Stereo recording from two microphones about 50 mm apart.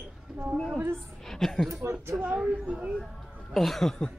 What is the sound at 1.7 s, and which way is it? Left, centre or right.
Speech, right.